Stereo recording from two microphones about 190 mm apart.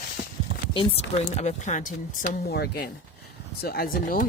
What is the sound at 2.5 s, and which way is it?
Speech, 60° left (ahead or behind).